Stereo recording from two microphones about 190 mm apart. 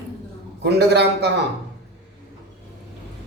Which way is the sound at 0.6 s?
60° right (ahead or behind).